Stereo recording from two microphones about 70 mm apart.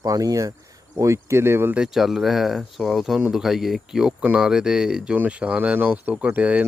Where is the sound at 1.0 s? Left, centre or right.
Right.